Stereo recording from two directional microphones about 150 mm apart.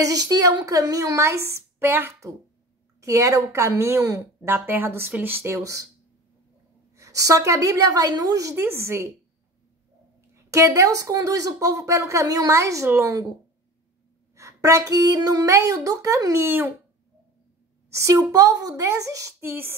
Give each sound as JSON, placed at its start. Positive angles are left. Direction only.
{"t": 0.0, "sound": "a woman's voice", "side_deg": -25}
{"t": 7.0, "sound": "a woman's voice", "side_deg": -25}
{"t": 10.3, "sound": "a woman's voice", "side_deg": -20}
{"t": 14.3, "sound": "a woman's voice", "side_deg": -20}
{"t": 17.8, "sound": "a woman's voice", "side_deg": -20}